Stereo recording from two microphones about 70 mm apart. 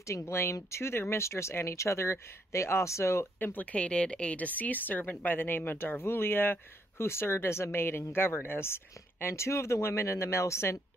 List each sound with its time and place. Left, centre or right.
0.0 s speech: left
3.3 s a woman's voice: left